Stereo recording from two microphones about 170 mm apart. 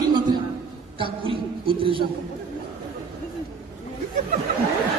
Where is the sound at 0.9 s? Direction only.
30° right (ahead or behind).